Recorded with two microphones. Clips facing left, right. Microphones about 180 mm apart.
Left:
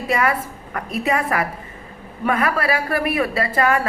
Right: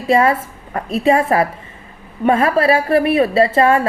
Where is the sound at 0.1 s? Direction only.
25° right (ahead or behind).